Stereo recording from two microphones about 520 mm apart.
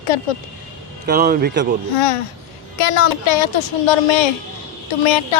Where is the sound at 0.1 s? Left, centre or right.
Left.